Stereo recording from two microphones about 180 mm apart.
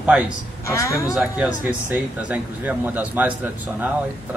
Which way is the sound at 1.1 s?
5° right (ahead or behind).